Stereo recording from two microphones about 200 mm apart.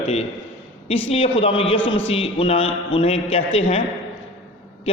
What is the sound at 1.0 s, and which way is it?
A man's voice, 30° left (ahead or behind).